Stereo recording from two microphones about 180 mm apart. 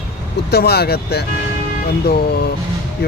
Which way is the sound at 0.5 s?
60° left (ahead or behind).